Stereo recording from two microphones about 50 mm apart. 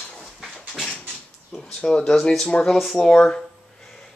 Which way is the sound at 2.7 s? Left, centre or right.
Centre.